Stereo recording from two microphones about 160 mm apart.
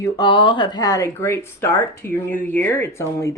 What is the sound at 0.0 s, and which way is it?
Speech, 30° left (ahead or behind).